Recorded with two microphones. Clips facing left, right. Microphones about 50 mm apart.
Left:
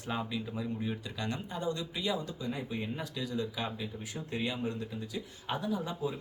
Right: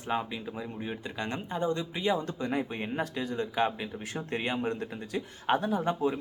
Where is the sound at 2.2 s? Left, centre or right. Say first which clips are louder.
Right 6 dB; right.